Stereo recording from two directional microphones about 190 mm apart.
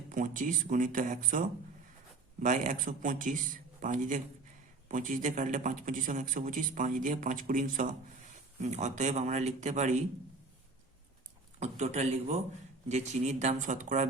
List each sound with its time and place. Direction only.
0.1 s a man's voice: 45° right (ahead or behind)
11.6 s speech: 35° right (ahead or behind)